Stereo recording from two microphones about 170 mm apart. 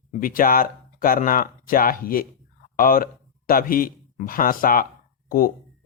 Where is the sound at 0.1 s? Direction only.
55° left (ahead or behind).